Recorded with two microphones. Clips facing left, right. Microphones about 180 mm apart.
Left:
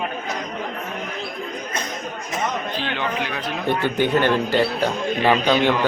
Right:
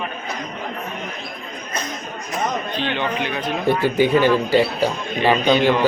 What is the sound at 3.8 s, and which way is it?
Speech, 10° right (ahead or behind).